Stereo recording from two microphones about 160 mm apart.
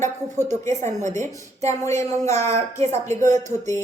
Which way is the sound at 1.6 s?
15° left (ahead or behind).